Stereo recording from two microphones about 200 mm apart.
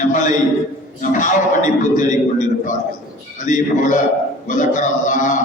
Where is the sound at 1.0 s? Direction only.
40° left (ahead or behind).